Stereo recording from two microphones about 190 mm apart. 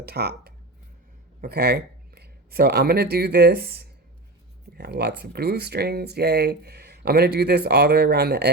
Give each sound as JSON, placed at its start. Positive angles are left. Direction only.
{"t": 0.0, "sound": "speech", "side_deg": -55}